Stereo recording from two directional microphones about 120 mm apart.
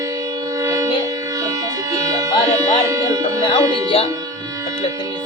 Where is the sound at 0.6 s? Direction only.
25° right (ahead or behind).